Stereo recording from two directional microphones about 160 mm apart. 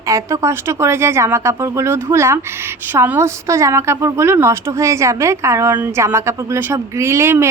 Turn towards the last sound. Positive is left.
turn(degrees=-15)  # may be behind; listen again after turning